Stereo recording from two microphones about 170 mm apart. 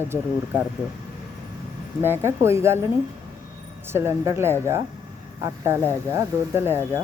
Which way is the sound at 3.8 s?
15° right (ahead or behind).